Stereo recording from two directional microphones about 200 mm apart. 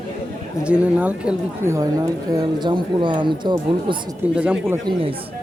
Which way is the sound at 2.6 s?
25° right (ahead or behind).